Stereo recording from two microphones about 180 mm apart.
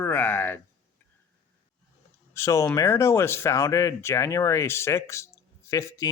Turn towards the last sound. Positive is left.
turn(degrees=15)  # may be behind; listen again after turning